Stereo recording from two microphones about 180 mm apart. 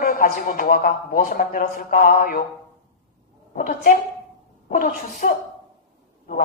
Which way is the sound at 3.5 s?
50° left (ahead or behind).